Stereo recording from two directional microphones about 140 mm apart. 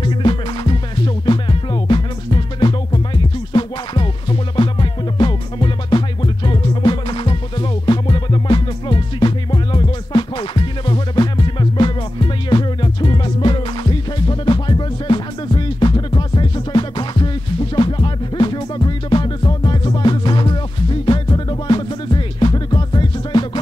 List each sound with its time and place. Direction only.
0.0 s music: 35° left (ahead or behind)